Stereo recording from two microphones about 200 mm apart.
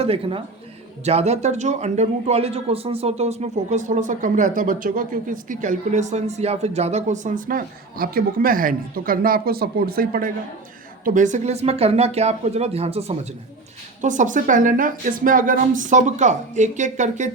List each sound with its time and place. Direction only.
0.0 s speech: 25° right (ahead or behind)